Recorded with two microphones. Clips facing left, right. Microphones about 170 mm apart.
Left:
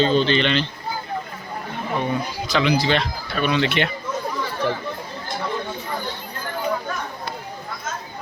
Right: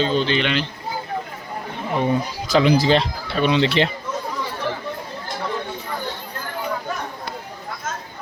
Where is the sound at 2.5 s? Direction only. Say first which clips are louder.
Right 4 dB; 35° right (ahead or behind).